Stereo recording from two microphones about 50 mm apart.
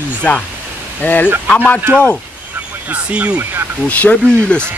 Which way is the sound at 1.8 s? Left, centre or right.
Right.